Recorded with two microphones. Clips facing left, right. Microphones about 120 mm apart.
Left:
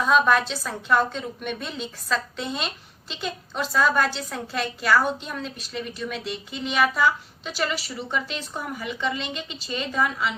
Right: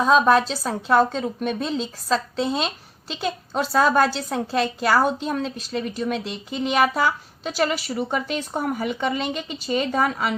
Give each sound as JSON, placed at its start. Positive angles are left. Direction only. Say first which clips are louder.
{"t": 0.0, "sound": "a woman's voice", "louder": "right 3 dB", "side_deg": -35}